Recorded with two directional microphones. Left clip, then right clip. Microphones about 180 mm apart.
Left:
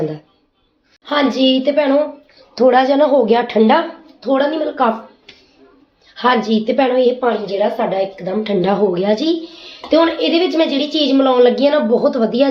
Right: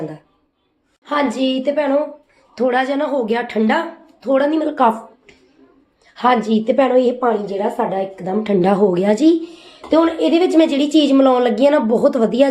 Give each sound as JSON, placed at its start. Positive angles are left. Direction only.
{"t": 1.0, "sound": "a woman's voice", "side_deg": -5}
{"t": 2.6, "sound": "a woman's voice", "side_deg": 5}
{"t": 4.2, "sound": "a woman's voice", "side_deg": -20}
{"t": 6.1, "sound": "a woman's voice", "side_deg": -35}